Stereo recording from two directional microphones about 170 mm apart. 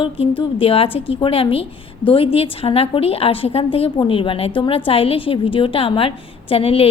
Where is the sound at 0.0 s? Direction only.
30° left (ahead or behind).